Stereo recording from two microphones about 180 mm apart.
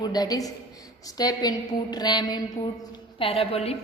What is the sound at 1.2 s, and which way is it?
A woman's voice, 20° left (ahead or behind).